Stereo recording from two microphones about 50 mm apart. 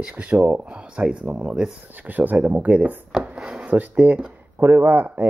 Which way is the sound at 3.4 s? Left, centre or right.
Centre.